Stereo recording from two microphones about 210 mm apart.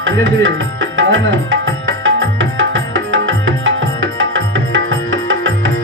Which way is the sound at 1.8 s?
65° right (ahead or behind).